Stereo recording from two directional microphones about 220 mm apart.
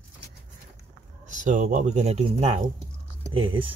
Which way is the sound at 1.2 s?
35° right (ahead or behind).